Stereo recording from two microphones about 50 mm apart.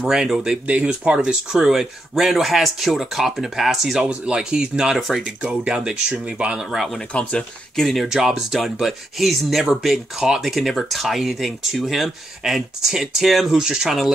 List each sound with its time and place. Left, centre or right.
0.1 s speech: centre
4.0 s speech: right
4.9 s speech: centre
5.2 s speech: centre
7.0 s speech: left
7.7 s speech: centre